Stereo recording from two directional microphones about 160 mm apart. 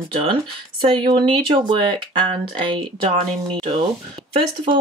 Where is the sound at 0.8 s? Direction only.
30° right (ahead or behind).